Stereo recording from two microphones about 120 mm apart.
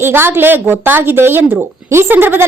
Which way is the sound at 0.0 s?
20° right (ahead or behind).